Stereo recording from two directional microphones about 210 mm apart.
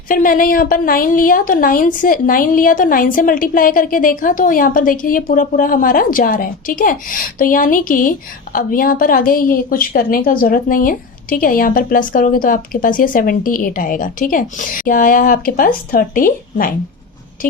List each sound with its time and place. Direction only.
0.1 s a woman's voice: 40° left (ahead or behind)